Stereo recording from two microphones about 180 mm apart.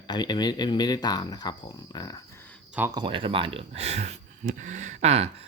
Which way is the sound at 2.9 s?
25° right (ahead or behind).